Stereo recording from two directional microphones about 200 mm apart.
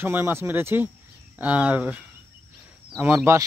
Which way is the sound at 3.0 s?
10° right (ahead or behind).